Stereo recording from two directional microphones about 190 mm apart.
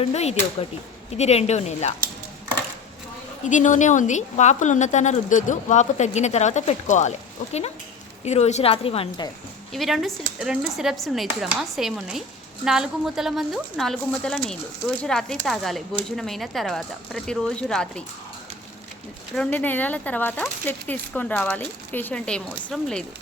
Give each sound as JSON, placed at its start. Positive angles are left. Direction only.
{"t": 0.0, "sound": "a woman's voice", "side_deg": 35}
{"t": 3.4, "sound": "a woman's voice", "side_deg": 40}
{"t": 9.7, "sound": "speech", "side_deg": 0}
{"t": 19.3, "sound": "speech", "side_deg": 5}